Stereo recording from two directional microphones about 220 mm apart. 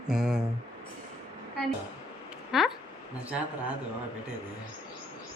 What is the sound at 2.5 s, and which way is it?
Speech, centre (ahead or behind).